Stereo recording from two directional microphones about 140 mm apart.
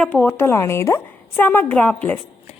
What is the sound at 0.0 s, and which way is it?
A woman's voice, 10° left (ahead or behind).